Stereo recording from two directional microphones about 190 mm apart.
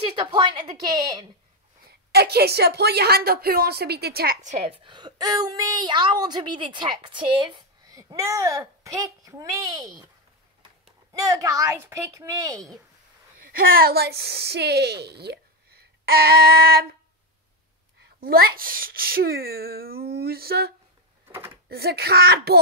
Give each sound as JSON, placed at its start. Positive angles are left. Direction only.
{"t": 0.9, "sound": "a woman's voice", "side_deg": -20}
{"t": 1.9, "sound": "a woman's voice", "side_deg": -60}
{"t": 4.8, "sound": "a woman's voice", "side_deg": -25}
{"t": 11.1, "sound": "speech", "side_deg": -15}
{"t": 13.4, "sound": "a woman's voice", "side_deg": -50}
{"t": 18.2, "sound": "a woman's voice", "side_deg": -55}